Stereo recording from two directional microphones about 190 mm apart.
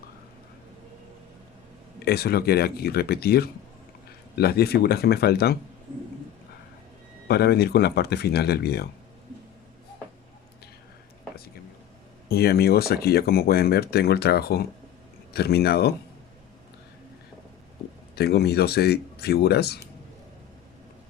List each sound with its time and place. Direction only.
2.0 s speech: 55° left (ahead or behind)
7.3 s speech: 60° left (ahead or behind)
12.3 s speech: 55° left (ahead or behind)
18.2 s speech: 60° left (ahead or behind)